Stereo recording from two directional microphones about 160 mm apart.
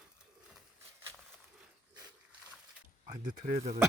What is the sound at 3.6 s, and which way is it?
Speech, 45° right (ahead or behind).